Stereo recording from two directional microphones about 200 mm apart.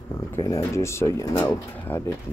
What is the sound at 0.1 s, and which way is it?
Speech, 15° left (ahead or behind).